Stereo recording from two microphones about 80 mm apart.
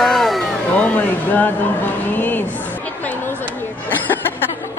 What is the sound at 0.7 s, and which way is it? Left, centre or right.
Speech, centre.